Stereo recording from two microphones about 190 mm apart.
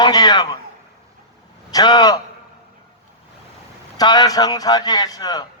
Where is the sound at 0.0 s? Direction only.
20° left (ahead or behind).